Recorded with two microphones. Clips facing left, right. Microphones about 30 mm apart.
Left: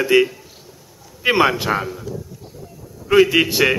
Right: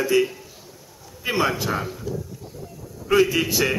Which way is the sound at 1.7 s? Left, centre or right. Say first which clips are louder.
Left 5 dB; left.